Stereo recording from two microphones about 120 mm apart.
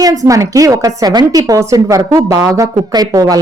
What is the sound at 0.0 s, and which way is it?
A woman's voice, 30° right (ahead or behind).